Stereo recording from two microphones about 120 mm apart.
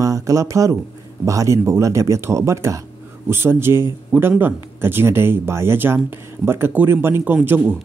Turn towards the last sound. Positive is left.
turn(degrees=-15)  # may be behind; listen again after turning